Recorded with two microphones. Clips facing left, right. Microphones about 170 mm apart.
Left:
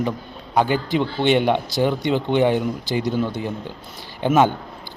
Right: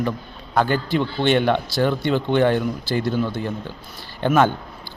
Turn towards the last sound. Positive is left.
turn(degrees=15)  # may be behind; listen again after turning